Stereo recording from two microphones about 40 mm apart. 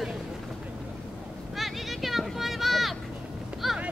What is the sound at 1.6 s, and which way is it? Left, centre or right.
Vehicle, centre.